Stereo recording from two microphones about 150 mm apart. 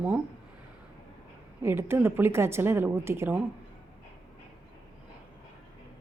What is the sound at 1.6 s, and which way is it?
A woman's voice, 15° right (ahead or behind).